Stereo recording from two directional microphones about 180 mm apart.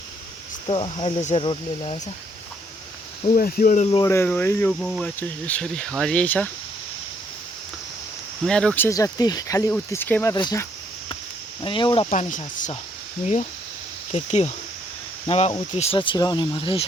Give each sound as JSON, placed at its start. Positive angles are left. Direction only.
{"t": 0.7, "sound": "speech", "side_deg": 30}
{"t": 3.3, "sound": "speech", "side_deg": 50}
{"t": 3.8, "sound": "speech", "side_deg": 20}
{"t": 8.4, "sound": "speech", "side_deg": 5}
{"t": 12.1, "sound": "speech", "side_deg": 45}
{"t": 14.1, "sound": "speech", "side_deg": 40}